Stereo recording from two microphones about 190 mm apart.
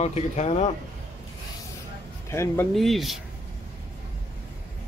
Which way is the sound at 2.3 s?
15° left (ahead or behind).